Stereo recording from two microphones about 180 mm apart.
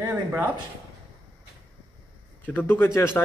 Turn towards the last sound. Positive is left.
turn(degrees=15)  # may be behind; listen again after turning